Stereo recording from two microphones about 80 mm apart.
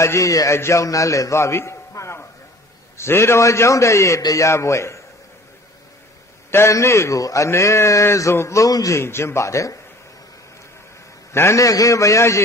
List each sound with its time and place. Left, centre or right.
0.0 s a man's voice: left
6.5 s a man's voice: left
9.0 s a man's voice: left
11.3 s a man's voice: left
11.6 s a man's voice: left